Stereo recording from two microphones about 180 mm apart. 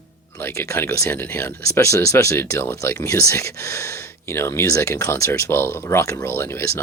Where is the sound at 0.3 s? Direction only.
15° left (ahead or behind).